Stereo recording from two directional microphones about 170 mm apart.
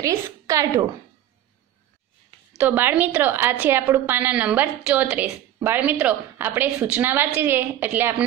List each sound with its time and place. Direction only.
0.0 s a woman's voice: 20° right (ahead or behind)
2.5 s a woman's voice: 10° right (ahead or behind)